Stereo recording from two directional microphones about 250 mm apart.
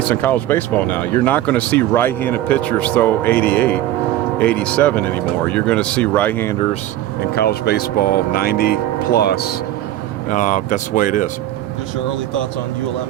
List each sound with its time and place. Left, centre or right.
0.1 s speech: centre
7.3 s speech: left